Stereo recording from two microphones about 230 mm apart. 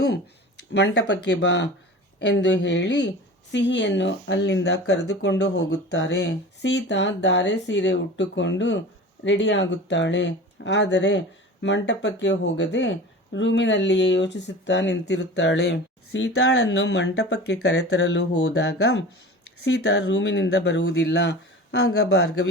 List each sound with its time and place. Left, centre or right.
0.7 s speech: left